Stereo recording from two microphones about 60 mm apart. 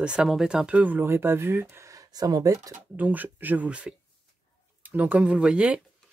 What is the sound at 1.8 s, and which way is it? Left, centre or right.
Speech, right.